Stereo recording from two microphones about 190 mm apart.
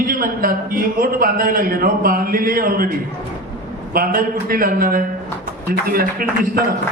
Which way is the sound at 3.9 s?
50° right (ahead or behind).